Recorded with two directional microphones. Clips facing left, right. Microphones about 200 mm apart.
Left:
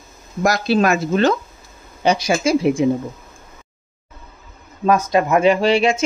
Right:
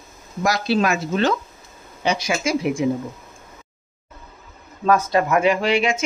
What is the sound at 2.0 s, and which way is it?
Speech, 35° left (ahead or behind).